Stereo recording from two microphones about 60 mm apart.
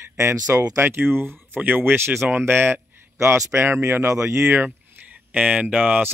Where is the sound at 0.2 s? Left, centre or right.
Right.